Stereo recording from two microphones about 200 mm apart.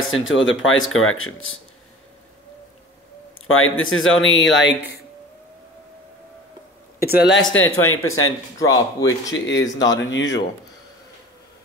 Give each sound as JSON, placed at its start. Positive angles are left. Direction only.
{"t": 0.1, "sound": "speech", "side_deg": 75}
{"t": 3.4, "sound": "speech", "side_deg": 90}
{"t": 7.0, "sound": "speech", "side_deg": 50}
{"t": 7.5, "sound": "speech", "side_deg": 85}
{"t": 8.5, "sound": "a man's voice", "side_deg": 15}
{"t": 9.3, "sound": "speech", "side_deg": 65}
{"t": 9.8, "sound": "speech", "side_deg": 20}
{"t": 10.1, "sound": "speech", "side_deg": 65}